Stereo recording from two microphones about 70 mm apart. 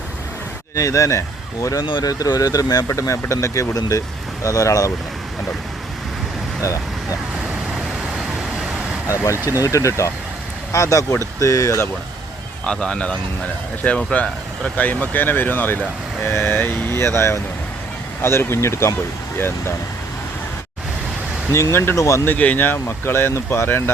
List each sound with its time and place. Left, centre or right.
0.8 s speech: left
1.6 s speech: left
2.9 s speech: left
6.6 s speech: left
9.3 s speech: right
9.6 s speech: left
12.6 s speech: centre; by 19.7 s left
21.5 s speech: left
21.9 s speech: left
22.3 s speech: left